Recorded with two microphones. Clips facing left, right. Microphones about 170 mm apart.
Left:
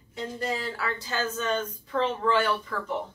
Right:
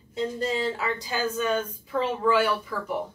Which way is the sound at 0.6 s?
25° right (ahead or behind).